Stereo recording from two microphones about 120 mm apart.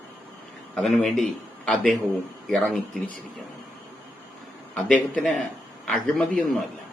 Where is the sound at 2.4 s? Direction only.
5° left (ahead or behind).